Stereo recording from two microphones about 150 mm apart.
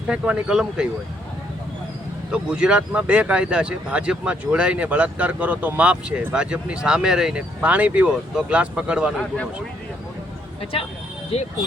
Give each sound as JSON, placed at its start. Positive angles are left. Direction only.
{"t": 0.1, "sound": "speech", "side_deg": -5}
{"t": 2.3, "sound": "speech", "side_deg": -5}
{"t": 11.3, "sound": "speech", "side_deg": 40}